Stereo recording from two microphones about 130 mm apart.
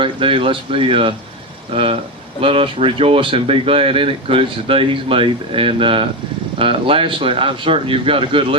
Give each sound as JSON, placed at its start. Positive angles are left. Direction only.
{"t": 0.0, "sound": "speech", "side_deg": -45}